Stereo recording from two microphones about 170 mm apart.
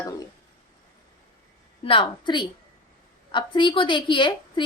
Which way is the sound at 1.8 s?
30° left (ahead or behind).